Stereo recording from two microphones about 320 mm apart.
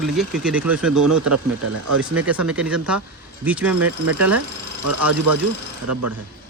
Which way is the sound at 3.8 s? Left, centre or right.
Right.